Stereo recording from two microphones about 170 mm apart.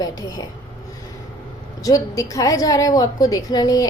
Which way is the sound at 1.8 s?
20° left (ahead or behind).